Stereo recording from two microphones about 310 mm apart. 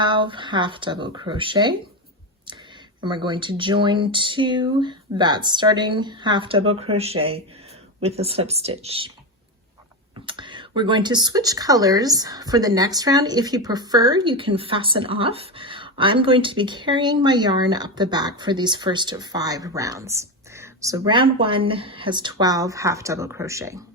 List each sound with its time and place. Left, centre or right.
0.0 s speech: centre
3.2 s speech: centre
10.2 s speech: centre